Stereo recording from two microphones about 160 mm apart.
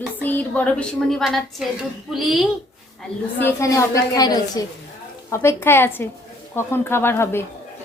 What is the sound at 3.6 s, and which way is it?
A woman's voice, 20° left (ahead or behind).